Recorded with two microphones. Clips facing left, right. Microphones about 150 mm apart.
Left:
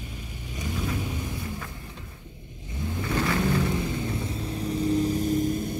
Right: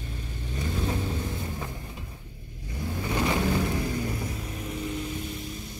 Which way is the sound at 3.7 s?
25° left (ahead or behind).